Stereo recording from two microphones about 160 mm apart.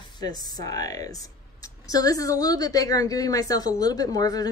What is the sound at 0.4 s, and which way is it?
Speech, 25° left (ahead or behind).